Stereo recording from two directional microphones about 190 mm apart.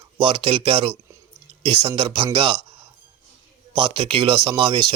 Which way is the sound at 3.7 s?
30° right (ahead or behind).